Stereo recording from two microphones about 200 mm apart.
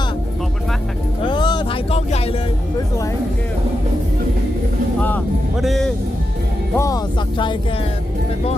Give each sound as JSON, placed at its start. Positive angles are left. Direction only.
{"t": 1.2, "sound": "music", "side_deg": 25}
{"t": 4.9, "sound": "music", "side_deg": 5}
{"t": 6.7, "sound": "speech", "side_deg": 15}